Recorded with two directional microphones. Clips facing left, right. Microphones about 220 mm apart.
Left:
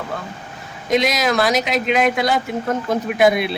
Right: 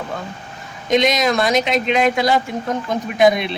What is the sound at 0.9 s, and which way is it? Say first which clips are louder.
Speech: right 2 dB; centre (ahead or behind).